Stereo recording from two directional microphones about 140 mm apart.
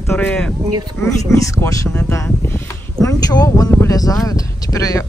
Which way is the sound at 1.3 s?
20° left (ahead or behind).